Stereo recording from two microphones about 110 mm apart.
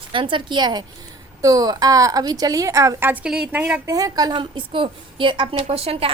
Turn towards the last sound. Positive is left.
turn(degrees=-60)  # may be behind; listen again after turning